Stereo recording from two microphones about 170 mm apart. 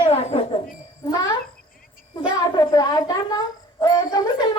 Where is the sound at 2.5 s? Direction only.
25° left (ahead or behind).